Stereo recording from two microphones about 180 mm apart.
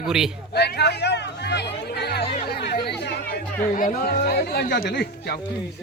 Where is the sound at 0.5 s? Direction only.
65° left (ahead or behind).